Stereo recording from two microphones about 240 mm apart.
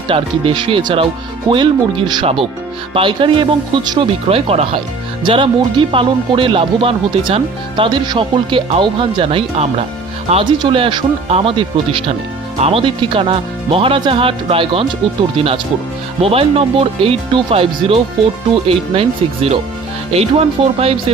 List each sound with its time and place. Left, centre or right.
0.1 s speech: right